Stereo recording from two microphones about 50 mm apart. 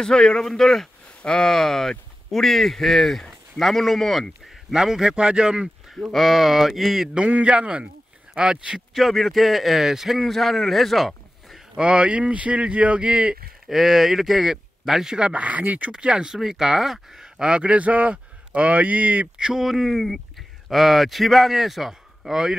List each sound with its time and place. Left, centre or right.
0.0 s speech: centre
4.7 s speech: centre
6.1 s a man's voice: centre
7.2 s speech: right
8.9 s a man's voice: centre
11.8 s speech: right
13.7 s speech: centre
15.3 s speech: right
15.9 s speech: centre
17.4 s a man's voice: centre
19.3 s a man's voice: centre